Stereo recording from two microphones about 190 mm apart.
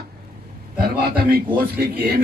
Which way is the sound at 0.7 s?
55° right (ahead or behind).